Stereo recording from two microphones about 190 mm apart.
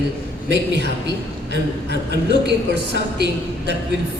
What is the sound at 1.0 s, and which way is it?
A woman's voice, 65° right (ahead or behind).